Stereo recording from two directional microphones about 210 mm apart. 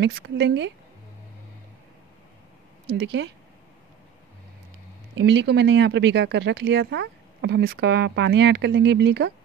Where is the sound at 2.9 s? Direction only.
55° right (ahead or behind).